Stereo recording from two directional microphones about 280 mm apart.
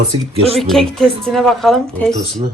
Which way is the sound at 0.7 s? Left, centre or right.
Centre.